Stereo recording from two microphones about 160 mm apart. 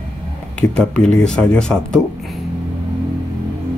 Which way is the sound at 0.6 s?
5° left (ahead or behind).